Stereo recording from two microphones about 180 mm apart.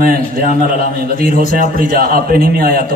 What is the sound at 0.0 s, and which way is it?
A man's voice, 55° right (ahead or behind).